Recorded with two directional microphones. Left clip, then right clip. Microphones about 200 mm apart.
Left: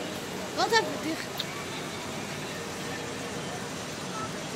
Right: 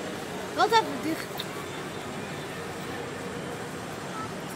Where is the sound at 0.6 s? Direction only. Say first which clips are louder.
Right 3 dB; 55° right (ahead or behind).